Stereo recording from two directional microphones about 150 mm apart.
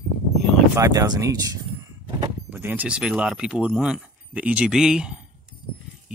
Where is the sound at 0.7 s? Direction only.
25° right (ahead or behind).